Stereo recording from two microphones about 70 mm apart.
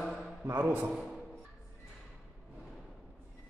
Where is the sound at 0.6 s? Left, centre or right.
Right.